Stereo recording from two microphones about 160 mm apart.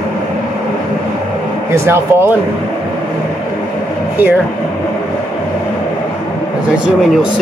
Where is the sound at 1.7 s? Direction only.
15° right (ahead or behind).